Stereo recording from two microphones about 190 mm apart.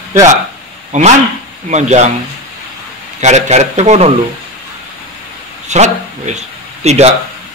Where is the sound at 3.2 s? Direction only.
35° right (ahead or behind).